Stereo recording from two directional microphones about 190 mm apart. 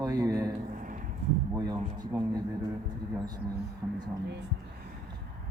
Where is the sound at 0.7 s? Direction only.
45° right (ahead or behind).